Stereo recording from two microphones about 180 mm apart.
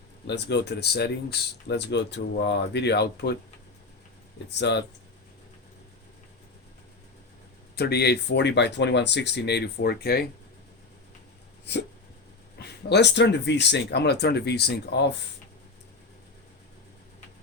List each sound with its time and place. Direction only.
0.3 s speech: 70° left (ahead or behind)
4.4 s speech: 70° left (ahead or behind)
7.8 s speech: 65° left (ahead or behind)
11.6 s dog: 70° left (ahead or behind)
12.5 s speech: 65° left (ahead or behind)